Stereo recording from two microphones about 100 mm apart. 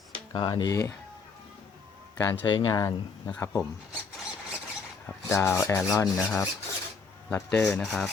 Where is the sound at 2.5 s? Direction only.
50° left (ahead or behind).